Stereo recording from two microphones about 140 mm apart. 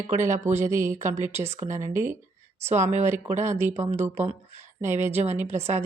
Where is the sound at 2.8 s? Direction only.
55° right (ahead or behind).